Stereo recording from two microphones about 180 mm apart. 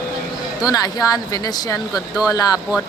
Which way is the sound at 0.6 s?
20° left (ahead or behind).